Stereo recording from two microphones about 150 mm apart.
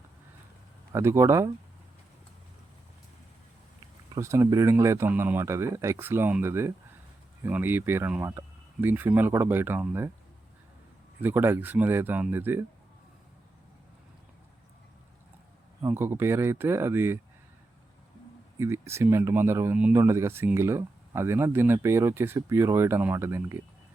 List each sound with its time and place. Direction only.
0.9 s speech: 20° right (ahead or behind)
4.1 s speech: 20° right (ahead or behind)
11.2 s speech: 15° right (ahead or behind)
15.8 s speech: 15° right (ahead or behind)
18.6 s speech: 20° right (ahead or behind)